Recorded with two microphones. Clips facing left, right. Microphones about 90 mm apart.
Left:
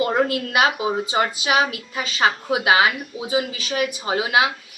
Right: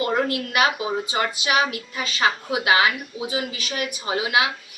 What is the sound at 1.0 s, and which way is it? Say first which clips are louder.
Speech: left 3 dB; 25° left (ahead or behind).